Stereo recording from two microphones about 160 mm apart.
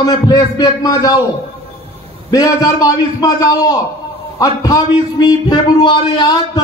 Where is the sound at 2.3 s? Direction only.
20° left (ahead or behind).